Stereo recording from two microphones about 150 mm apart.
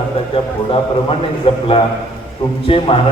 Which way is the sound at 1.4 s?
40° left (ahead or behind).